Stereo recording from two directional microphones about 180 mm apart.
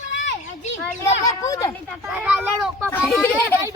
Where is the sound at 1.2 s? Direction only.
20° left (ahead or behind).